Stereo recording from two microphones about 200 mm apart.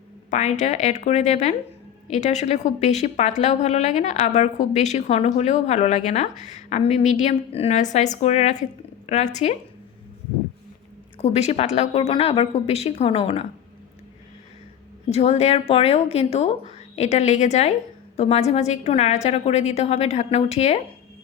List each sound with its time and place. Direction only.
0.3 s a woman's voice: 35° left (ahead or behind)
11.2 s a woman's voice: 30° left (ahead or behind)
15.0 s a woman's voice: 30° left (ahead or behind)